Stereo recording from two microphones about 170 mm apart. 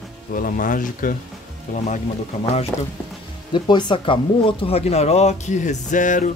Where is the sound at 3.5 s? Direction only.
25° left (ahead or behind).